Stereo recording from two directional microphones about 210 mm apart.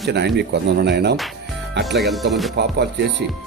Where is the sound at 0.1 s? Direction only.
55° right (ahead or behind).